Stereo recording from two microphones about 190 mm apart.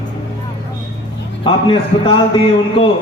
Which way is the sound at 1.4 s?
25° left (ahead or behind).